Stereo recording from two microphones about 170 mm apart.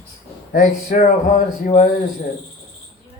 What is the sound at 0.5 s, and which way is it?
Speech, 50° left (ahead or behind).